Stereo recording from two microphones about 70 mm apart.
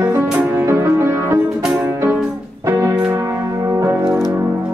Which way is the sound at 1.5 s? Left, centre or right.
Centre.